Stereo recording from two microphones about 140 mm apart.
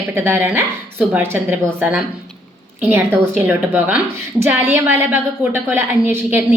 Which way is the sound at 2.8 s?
15° right (ahead or behind).